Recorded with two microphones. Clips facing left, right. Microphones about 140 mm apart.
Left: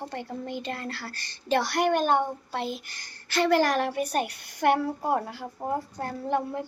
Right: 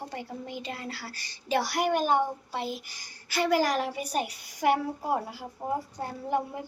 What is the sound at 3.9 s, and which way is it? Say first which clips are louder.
Speech: left 3 dB; 55° left (ahead or behind).